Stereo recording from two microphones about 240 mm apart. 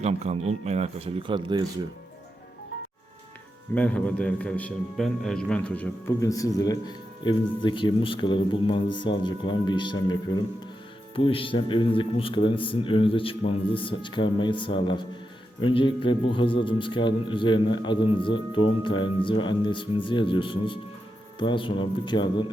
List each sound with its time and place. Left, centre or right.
0.0 s speech: right
3.8 s a man's voice: centre